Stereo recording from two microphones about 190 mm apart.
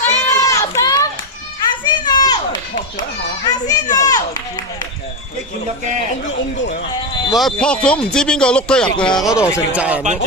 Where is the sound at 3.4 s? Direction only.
20° left (ahead or behind).